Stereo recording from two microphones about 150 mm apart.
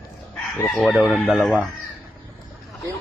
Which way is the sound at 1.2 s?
5° right (ahead or behind).